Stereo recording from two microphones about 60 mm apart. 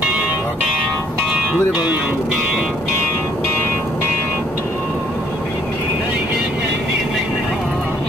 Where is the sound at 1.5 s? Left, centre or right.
Right.